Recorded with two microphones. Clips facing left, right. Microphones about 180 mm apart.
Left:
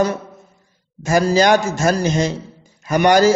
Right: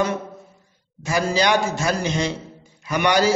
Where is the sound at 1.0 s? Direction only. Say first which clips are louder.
Left 6 dB; 45° left (ahead or behind).